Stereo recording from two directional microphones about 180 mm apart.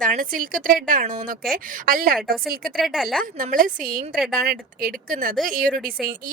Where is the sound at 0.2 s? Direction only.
50° right (ahead or behind).